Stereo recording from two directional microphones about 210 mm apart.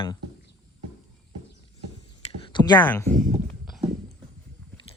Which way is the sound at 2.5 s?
20° left (ahead or behind).